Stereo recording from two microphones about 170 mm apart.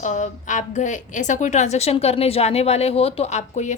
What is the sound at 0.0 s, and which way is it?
A woman's voice, 45° left (ahead or behind).